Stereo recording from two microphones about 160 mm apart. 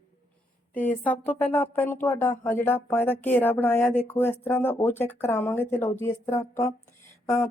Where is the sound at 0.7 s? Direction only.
10° left (ahead or behind).